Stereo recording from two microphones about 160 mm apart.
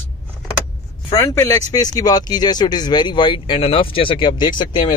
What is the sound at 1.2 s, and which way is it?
Speech, 20° left (ahead or behind).